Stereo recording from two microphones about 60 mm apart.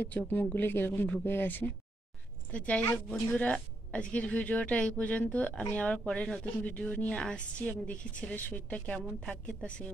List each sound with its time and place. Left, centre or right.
0.0 s speech: left
2.5 s a woman's voice: left
6.4 s a woman's voice: left